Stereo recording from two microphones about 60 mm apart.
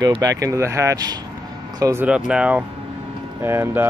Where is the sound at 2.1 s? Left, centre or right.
Centre.